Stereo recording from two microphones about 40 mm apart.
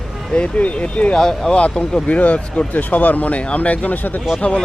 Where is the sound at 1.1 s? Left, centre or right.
Centre.